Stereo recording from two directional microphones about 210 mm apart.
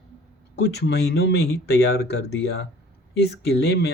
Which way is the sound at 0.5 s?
50° left (ahead or behind).